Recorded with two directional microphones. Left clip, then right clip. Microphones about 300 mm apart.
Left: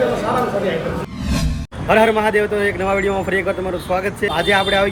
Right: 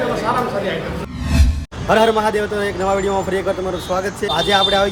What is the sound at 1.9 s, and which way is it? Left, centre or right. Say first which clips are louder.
Speech: even; centre.